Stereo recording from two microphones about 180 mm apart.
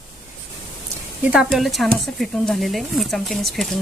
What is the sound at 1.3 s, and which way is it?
Speech, centre (ahead or behind).